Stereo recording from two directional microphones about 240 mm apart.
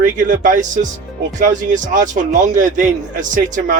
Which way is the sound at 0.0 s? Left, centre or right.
Right.